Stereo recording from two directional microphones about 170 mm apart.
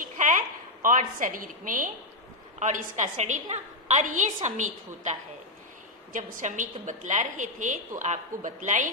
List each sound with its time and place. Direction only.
0.0 s a sound: 50° right (ahead or behind)
2.6 s a woman's voice: 45° right (ahead or behind)
6.1 s a woman's voice: 50° right (ahead or behind)